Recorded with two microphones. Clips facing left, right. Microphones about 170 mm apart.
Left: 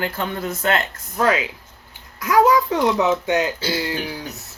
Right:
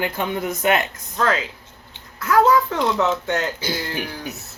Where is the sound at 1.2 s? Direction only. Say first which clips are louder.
Left 2 dB; 15° left (ahead or behind).